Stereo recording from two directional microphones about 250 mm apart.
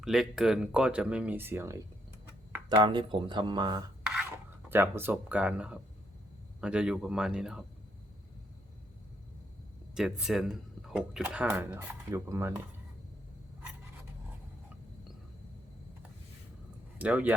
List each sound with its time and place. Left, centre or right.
0.0 s speech: centre
4.7 s speech: centre
9.9 s speech: centre
17.0 s speech: centre